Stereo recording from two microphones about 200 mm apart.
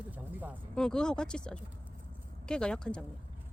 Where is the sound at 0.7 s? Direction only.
5° left (ahead or behind).